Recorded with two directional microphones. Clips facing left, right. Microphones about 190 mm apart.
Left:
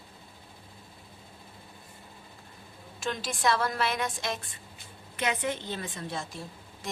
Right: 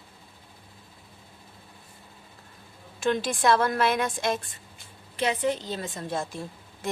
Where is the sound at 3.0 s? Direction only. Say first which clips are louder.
Right 6 dB; 55° right (ahead or behind).